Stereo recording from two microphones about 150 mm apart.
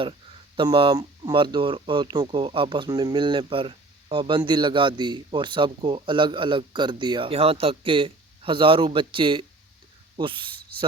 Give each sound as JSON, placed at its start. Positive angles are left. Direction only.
{"t": 0.5, "sound": "speech", "side_deg": -30}